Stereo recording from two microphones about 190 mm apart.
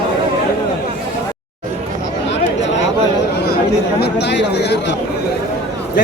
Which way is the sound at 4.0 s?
65° left (ahead or behind).